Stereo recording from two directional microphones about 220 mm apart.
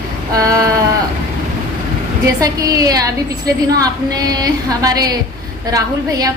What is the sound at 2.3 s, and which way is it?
A woman's voice, 15° right (ahead or behind).